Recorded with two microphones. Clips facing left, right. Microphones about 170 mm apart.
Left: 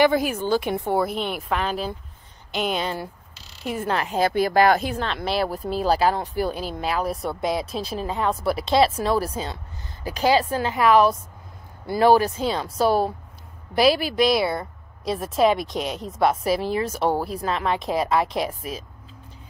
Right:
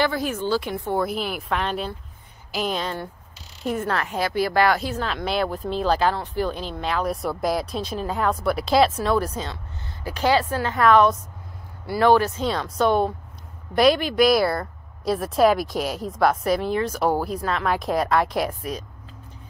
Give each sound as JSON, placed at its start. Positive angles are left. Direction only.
{"t": 0.0, "sound": "speech", "side_deg": 10}
{"t": 1.0, "sound": "speech", "side_deg": 0}
{"t": 3.8, "sound": "speech", "side_deg": 25}
{"t": 5.0, "sound": "speech", "side_deg": 0}